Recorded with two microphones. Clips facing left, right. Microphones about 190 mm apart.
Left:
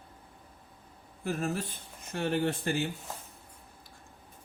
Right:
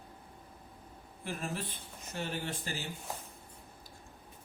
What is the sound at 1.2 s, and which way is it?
Speech, 45° left (ahead or behind).